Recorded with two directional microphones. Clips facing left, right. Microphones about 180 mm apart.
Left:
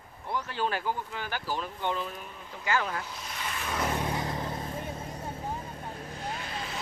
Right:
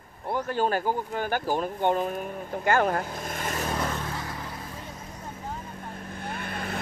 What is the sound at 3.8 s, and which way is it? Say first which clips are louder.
Vehicle: left 1 dB; 15° left (ahead or behind).